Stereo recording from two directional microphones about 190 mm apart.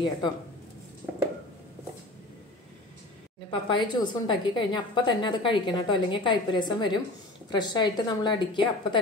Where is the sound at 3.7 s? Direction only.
25° left (ahead or behind).